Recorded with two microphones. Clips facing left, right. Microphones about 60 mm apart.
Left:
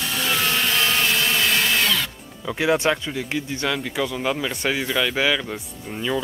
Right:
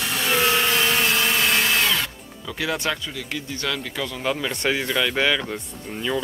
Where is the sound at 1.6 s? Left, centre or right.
Centre.